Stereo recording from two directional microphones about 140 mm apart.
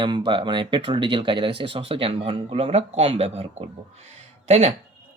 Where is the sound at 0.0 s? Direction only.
35° right (ahead or behind).